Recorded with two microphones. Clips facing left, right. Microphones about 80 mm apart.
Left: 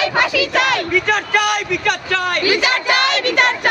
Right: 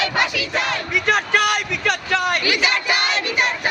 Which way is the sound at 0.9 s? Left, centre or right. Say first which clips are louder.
Left 2 dB; centre.